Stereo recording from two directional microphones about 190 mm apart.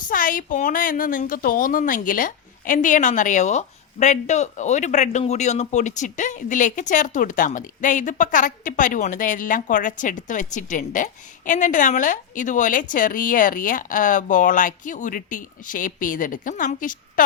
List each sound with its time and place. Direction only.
0.1 s speech: 45° left (ahead or behind)